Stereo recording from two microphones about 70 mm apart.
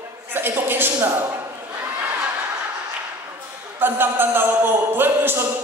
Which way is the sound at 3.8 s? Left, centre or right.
Right.